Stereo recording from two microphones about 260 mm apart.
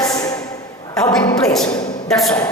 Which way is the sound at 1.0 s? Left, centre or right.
Centre.